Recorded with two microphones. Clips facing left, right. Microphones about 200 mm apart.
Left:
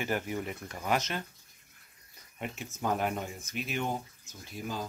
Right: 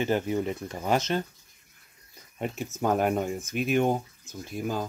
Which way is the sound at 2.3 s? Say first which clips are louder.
Right 7 dB; 40° right (ahead or behind).